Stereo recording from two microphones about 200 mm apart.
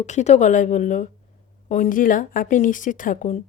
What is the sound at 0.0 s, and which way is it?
A woman's voice, 35° left (ahead or behind).